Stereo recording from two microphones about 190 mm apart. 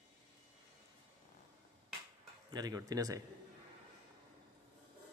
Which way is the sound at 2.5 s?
20° right (ahead or behind).